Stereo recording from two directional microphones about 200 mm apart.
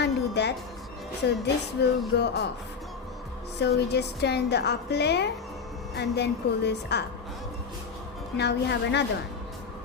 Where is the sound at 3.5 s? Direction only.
55° left (ahead or behind).